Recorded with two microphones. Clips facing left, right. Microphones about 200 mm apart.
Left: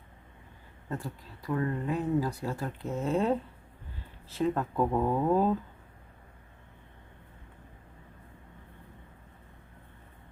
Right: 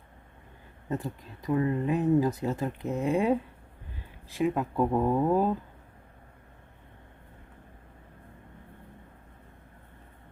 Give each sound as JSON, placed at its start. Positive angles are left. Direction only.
{"t": 0.9, "sound": "speech", "side_deg": -20}